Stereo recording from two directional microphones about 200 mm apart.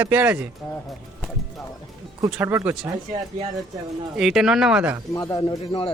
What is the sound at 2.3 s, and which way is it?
Speech, 10° right (ahead or behind).